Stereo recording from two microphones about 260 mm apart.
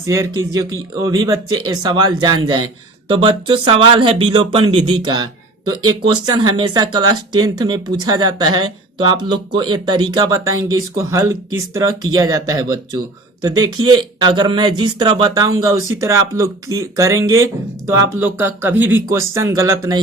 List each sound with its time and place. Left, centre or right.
0.0 s a man's voice: centre